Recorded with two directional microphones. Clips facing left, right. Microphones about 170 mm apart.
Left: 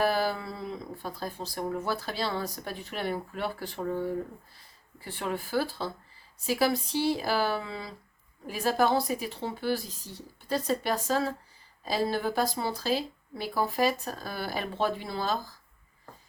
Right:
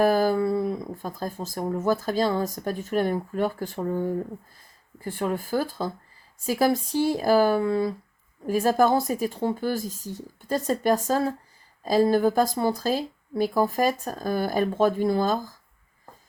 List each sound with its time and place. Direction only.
0.0 s speech: 45° right (ahead or behind)